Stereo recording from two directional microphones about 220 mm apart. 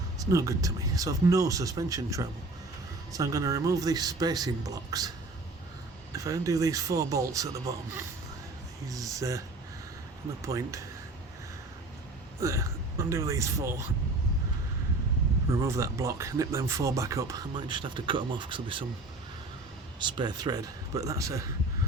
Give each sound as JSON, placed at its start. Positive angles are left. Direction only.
{"t": 0.2, "sound": "speech", "side_deg": -15}
{"t": 6.1, "sound": "speech", "side_deg": -15}
{"t": 10.4, "sound": "speech", "side_deg": -15}
{"t": 12.4, "sound": "speech", "side_deg": -15}
{"t": 15.4, "sound": "speech", "side_deg": -15}
{"t": 20.0, "sound": "speech", "side_deg": -20}